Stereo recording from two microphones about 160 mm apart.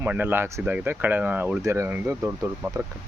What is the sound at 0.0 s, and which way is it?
Speech, 10° right (ahead or behind).